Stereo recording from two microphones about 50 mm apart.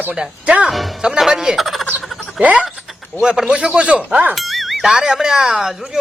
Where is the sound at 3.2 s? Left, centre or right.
Centre.